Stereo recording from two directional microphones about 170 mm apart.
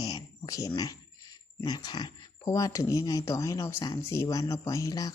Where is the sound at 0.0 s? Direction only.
20° left (ahead or behind).